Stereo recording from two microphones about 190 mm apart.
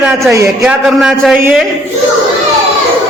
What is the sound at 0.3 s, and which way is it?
Speech, 15° right (ahead or behind).